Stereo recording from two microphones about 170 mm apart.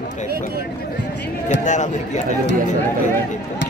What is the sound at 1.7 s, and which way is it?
Speech, 45° left (ahead or behind).